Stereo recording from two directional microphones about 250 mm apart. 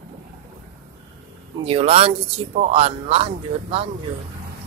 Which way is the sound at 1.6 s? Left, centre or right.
Right.